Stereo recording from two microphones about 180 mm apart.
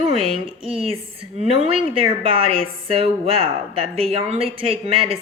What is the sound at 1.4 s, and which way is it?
Speech, 35° right (ahead or behind).